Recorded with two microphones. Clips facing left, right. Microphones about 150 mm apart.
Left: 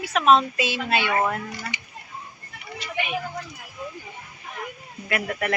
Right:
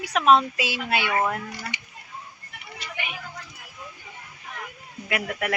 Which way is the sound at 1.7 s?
65° right (ahead or behind).